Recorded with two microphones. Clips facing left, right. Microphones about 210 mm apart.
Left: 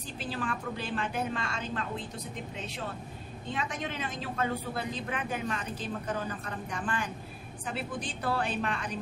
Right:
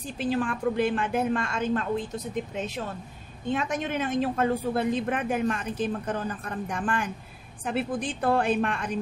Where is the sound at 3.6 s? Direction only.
50° right (ahead or behind).